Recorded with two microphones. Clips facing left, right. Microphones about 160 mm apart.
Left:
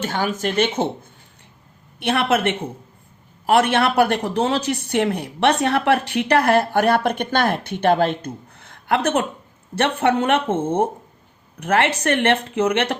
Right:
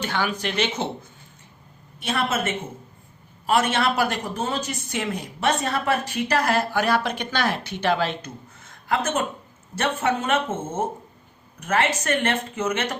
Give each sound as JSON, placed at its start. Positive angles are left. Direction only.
{"t": 0.0, "sound": "speech", "side_deg": 45}
{"t": 2.0, "sound": "speech", "side_deg": 65}